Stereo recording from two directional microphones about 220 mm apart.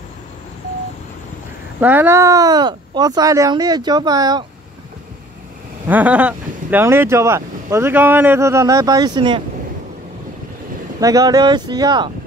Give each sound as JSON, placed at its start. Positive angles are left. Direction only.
{"t": 1.8, "sound": "speech", "side_deg": -10}
{"t": 5.9, "sound": "speech", "side_deg": -5}
{"t": 11.0, "sound": "speech", "side_deg": -15}